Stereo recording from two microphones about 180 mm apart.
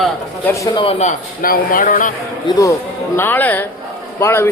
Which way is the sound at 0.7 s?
35° left (ahead or behind).